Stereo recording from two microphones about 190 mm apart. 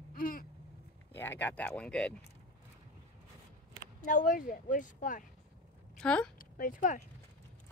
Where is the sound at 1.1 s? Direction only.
10° left (ahead or behind).